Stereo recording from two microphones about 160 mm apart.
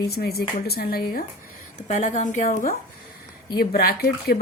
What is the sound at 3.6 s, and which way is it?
Speech, 75° left (ahead or behind).